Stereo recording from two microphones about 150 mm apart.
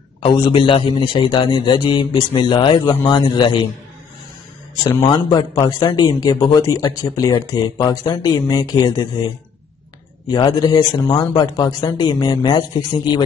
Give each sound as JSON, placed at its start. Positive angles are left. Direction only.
{"t": 0.2, "sound": "a man's voice", "side_deg": 35}
{"t": 5.1, "sound": "a man's voice", "side_deg": 30}
{"t": 10.2, "sound": "a man's voice", "side_deg": 30}